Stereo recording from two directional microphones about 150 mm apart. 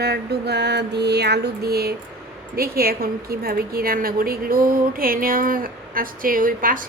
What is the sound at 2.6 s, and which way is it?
A woman's voice, 90° right.